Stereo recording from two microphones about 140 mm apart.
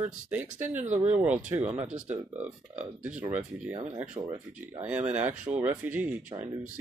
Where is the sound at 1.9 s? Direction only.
55° right (ahead or behind).